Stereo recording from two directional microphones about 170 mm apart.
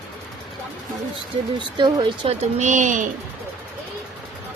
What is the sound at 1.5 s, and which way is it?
Speech, 25° right (ahead or behind).